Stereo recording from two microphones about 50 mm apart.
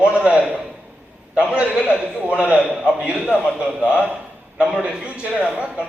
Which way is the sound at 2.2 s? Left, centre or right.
Right.